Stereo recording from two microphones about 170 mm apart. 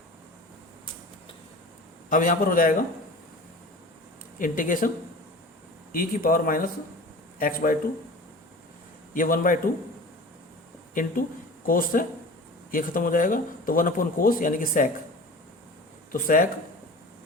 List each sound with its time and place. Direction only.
2.0 s a man's voice: 50° left (ahead or behind)
4.4 s a man's voice: 50° left (ahead or behind)
5.9 s speech: 55° left (ahead or behind)
9.1 s a man's voice: 55° left (ahead or behind)
10.9 s speech: 55° left (ahead or behind)
16.1 s speech: 55° left (ahead or behind)